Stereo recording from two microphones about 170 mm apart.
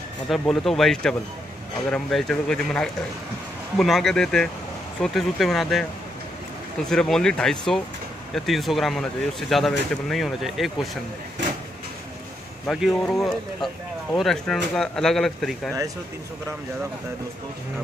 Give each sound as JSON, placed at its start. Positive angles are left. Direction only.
{"t": 0.3, "sound": "speech", "side_deg": 0}
{"t": 6.9, "sound": "speech", "side_deg": 5}
{"t": 12.6, "sound": "speech", "side_deg": 0}